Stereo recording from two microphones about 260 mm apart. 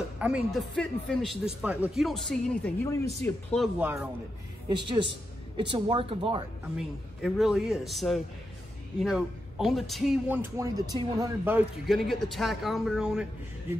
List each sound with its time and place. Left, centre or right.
0.2 s speech: centre
4.6 s a woman's voice: centre
6.8 s speech: centre